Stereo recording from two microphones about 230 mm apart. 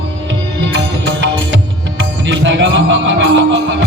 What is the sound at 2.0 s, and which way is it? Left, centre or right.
Music, right.